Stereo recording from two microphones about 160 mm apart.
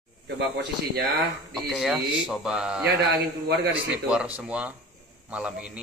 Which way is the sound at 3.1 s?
90° right.